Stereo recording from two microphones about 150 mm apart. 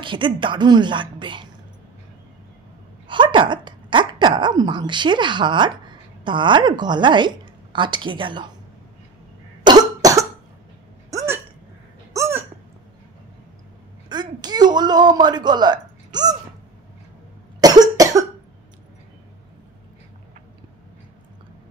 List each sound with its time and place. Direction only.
0.0 s a woman's voice: 35° right (ahead or behind)
3.1 s speech: 30° right (ahead or behind)
9.7 s cough: 25° right (ahead or behind)
11.1 s hiccup: 20° right (ahead or behind)
12.1 s a sound: 20° right (ahead or behind)
14.0 s a sound: 30° right (ahead or behind)
17.6 s cough: 25° right (ahead or behind)